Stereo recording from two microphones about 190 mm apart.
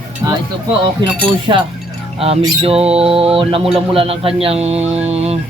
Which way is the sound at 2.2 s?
30° right (ahead or behind).